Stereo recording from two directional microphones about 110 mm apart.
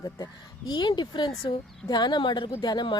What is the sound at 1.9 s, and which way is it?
Speech, 40° left (ahead or behind).